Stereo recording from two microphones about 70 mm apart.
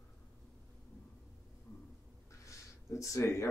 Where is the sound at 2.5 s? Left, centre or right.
Left.